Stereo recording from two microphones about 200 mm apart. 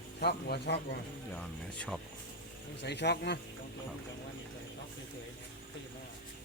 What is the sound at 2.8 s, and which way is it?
Speech, 55° left (ahead or behind).